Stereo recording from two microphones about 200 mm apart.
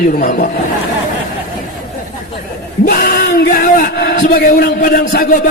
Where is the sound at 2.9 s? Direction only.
45° left (ahead or behind).